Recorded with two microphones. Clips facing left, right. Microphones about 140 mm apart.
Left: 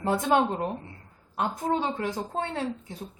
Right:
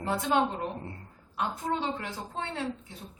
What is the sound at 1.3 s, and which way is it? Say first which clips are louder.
A woman's voice: left 4 dB; 45° left (ahead or behind).